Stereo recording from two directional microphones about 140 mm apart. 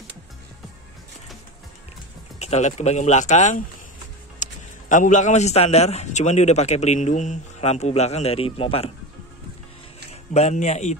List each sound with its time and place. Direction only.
2.3 s a man's voice: 50° left (ahead or behind)
10.3 s a man's voice: 55° left (ahead or behind)